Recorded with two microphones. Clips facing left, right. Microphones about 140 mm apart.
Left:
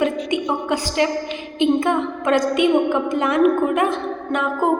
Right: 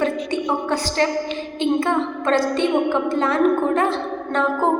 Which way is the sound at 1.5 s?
20° left (ahead or behind).